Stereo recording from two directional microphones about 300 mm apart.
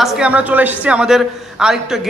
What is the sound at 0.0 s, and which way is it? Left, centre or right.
A man's voice, centre.